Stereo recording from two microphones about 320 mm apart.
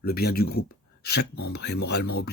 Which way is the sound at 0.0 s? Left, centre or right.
Left.